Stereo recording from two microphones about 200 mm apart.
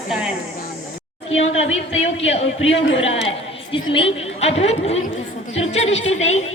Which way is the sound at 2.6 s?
70° left (ahead or behind).